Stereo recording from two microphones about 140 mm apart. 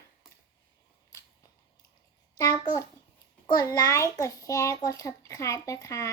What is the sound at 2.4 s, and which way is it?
A child's voice, 25° left (ahead or behind).